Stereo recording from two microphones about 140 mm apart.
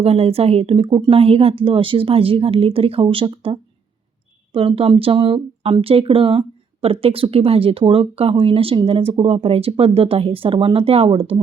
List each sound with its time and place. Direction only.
0.0 s speech: 45° right (ahead or behind)